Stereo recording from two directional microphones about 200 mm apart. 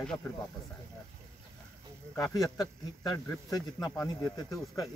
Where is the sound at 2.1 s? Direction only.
15° left (ahead or behind).